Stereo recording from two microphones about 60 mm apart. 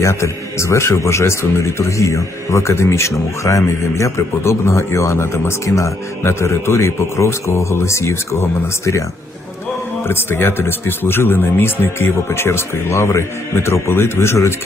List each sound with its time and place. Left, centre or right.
0.0 s speech: left
10.1 s speech: left